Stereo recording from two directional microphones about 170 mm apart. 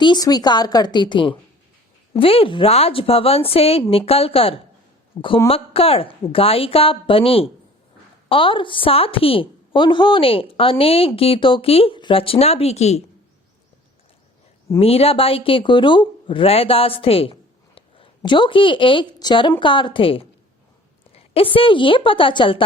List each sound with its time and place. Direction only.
0.0 s a woman's voice: 25° left (ahead or behind)
5.1 s a woman's voice: 15° left (ahead or behind)
5.5 s a woman's voice: 35° left (ahead or behind)
14.8 s a woman's voice: 35° left (ahead or behind)
21.3 s a woman's voice: 30° left (ahead or behind)